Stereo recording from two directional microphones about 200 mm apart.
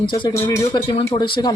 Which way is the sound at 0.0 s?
25° left (ahead or behind).